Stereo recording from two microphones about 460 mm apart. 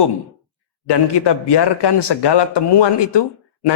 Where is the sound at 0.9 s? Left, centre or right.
Left.